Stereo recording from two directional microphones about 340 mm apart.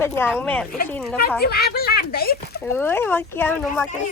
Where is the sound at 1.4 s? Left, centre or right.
Left.